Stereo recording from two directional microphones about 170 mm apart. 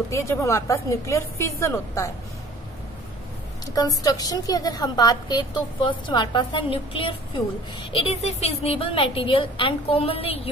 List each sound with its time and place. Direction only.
0.1 s a woman's voice: 15° left (ahead or behind)
3.7 s a woman's voice: 20° left (ahead or behind)